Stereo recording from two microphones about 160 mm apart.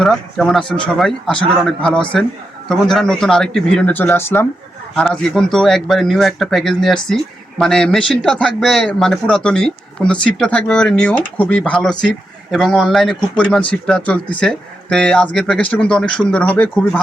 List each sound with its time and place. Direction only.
0.0 s a man's voice: centre (ahead or behind)